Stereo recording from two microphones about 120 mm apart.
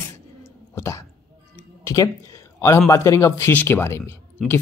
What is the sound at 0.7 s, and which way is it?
Speech, 25° left (ahead or behind).